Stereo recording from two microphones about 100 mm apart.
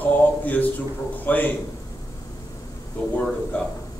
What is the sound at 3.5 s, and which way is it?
Speech, 15° left (ahead or behind).